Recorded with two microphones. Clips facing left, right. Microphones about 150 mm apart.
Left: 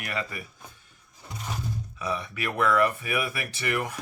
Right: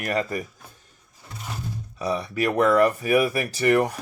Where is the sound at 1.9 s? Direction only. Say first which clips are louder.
Right 8 dB; 35° right (ahead or behind).